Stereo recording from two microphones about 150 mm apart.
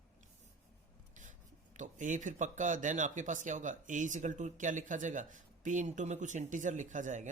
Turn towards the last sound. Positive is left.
turn(degrees=-55)  # may be behind; listen again after turning